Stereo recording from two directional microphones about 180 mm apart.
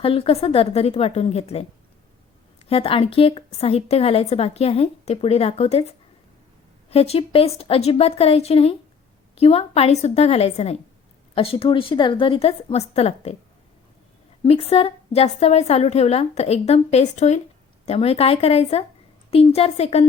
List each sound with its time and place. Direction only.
0.0 s a woman's voice: 30° left (ahead or behind)
2.6 s a woman's voice: 30° left (ahead or behind)
6.9 s a woman's voice: 35° left (ahead or behind)
14.4 s a woman's voice: 35° left (ahead or behind)